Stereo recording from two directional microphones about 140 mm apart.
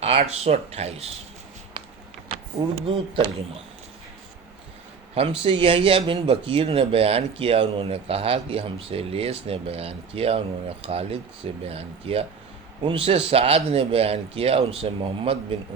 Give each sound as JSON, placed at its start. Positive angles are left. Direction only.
{"t": 0.0, "sound": "speech", "side_deg": -50}
{"t": 2.7, "sound": "speech", "side_deg": -40}
{"t": 5.4, "sound": "speech", "side_deg": -40}